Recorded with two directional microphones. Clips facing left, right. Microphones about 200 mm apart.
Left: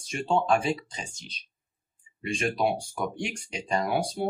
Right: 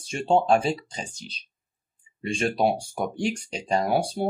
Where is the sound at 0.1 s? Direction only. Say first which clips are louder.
Right 4 dB; 35° right (ahead or behind).